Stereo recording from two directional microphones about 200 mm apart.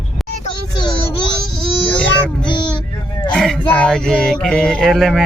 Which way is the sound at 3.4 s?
Centre (ahead or behind).